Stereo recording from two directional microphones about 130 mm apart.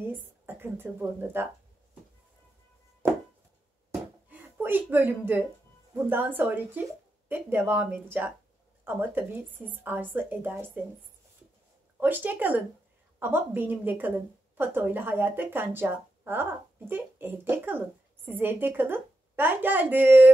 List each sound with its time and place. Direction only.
0.1 s speech: 15° right (ahead or behind)
4.3 s a woman's voice: 15° right (ahead or behind)
12.0 s a woman's voice: 15° right (ahead or behind)